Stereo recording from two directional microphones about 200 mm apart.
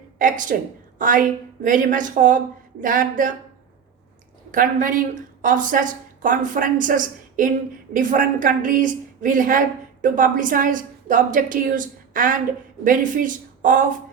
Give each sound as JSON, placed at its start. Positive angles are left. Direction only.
{"t": 0.2, "sound": "a woman's voice", "side_deg": -40}
{"t": 4.5, "sound": "a woman's voice", "side_deg": -40}